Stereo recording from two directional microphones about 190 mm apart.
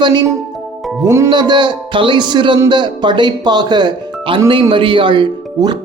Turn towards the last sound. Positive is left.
turn(degrees=-25)  # may be behind; listen again after turning